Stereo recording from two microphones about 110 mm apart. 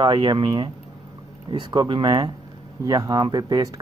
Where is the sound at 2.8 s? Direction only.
35° right (ahead or behind).